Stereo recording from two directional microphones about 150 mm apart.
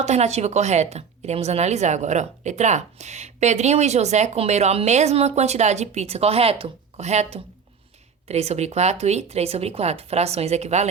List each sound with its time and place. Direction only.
0.0 s a woman's voice: 45° right (ahead or behind)